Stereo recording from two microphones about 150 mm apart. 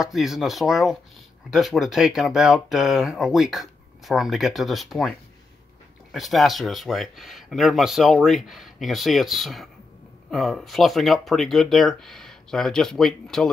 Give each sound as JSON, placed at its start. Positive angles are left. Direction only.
{"t": 0.0, "sound": "speech", "side_deg": 0}
{"t": 6.1, "sound": "speech", "side_deg": 0}